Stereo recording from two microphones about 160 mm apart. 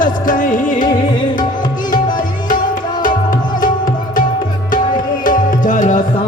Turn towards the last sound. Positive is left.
turn(degrees=55)  # may be behind; listen again after turning